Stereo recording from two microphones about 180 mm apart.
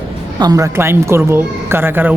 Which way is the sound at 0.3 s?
20° right (ahead or behind).